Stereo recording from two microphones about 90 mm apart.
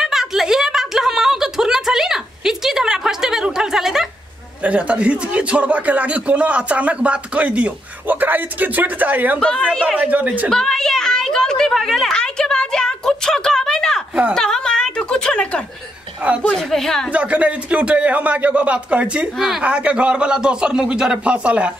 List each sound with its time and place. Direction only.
0.0 s a sound: 5° right (ahead or behind)
4.6 s speech: 15° right (ahead or behind)
9.4 s speech: 10° left (ahead or behind)
9.9 s speech: 15° right (ahead or behind)
10.5 s a sound: 5° left (ahead or behind)
16.4 s a woman's voice: 5° left (ahead or behind)
17.1 s speech: 15° right (ahead or behind)
19.3 s a woman's voice: 5° right (ahead or behind)
19.6 s speech: 15° right (ahead or behind)